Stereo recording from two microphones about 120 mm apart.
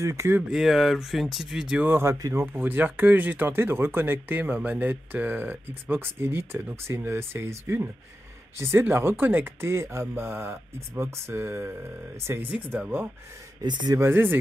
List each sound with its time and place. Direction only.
0.0 s speech: 25° right (ahead or behind)
0.5 s speech: centre (ahead or behind)
1.9 s speech: 20° right (ahead or behind)
12.7 s speech: 10° right (ahead or behind)
13.6 s speech: 30° right (ahead or behind)
13.9 s speech: 20° right (ahead or behind)